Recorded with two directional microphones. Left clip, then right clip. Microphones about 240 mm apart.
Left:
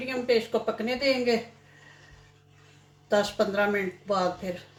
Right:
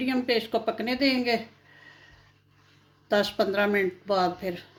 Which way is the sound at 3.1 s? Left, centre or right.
Right.